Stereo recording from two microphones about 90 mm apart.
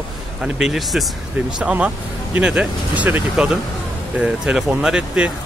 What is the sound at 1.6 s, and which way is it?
Speech, 15° right (ahead or behind).